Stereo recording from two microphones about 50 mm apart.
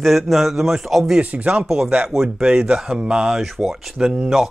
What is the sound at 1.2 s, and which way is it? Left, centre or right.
Speech, right.